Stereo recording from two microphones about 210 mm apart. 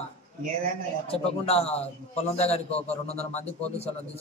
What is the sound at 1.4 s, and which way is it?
A man's voice, 30° left (ahead or behind).